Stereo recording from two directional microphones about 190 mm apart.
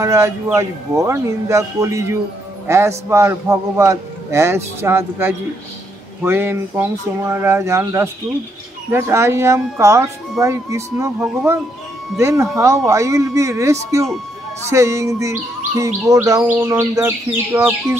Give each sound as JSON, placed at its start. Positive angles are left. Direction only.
{"t": 0.0, "sound": "chirp", "side_deg": -15}
{"t": 2.6, "sound": "a man's voice", "side_deg": -15}
{"t": 3.1, "sound": "chirp", "side_deg": -15}